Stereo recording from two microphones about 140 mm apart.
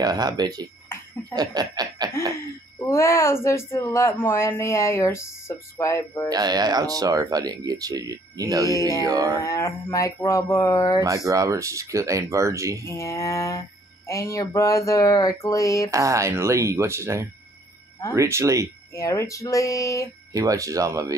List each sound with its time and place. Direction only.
0.0 s speech: 30° right (ahead or behind)
1.3 s laughter: 30° right (ahead or behind)
2.8 s mantra: 20° left (ahead or behind)
6.2 s speech: 30° right (ahead or behind)
9.4 s mantra: 20° left (ahead or behind)
11.2 s speech: 25° right (ahead or behind)
12.8 s mantra: 20° left (ahead or behind)
15.9 s speech: 20° right (ahead or behind)
18.9 s mantra: 20° left (ahead or behind)
20.3 s speech: 25° right (ahead or behind)